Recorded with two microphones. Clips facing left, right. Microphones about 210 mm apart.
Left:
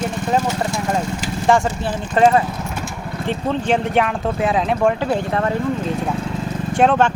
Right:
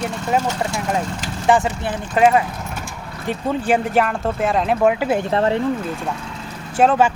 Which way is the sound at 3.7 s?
Centre (ahead or behind).